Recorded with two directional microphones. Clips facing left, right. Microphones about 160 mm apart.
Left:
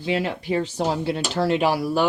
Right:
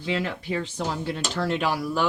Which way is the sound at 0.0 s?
25° left (ahead or behind).